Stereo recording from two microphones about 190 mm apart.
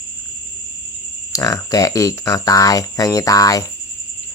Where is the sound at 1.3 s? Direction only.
15° left (ahead or behind).